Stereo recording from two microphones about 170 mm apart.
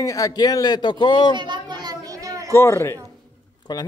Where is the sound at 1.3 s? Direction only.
25° right (ahead or behind).